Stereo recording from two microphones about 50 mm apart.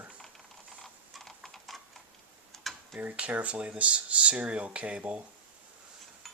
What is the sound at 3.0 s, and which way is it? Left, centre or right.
Speech, right.